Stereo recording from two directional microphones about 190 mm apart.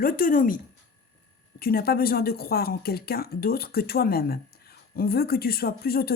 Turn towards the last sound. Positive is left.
turn(degrees=55)  # may be behind; listen again after turning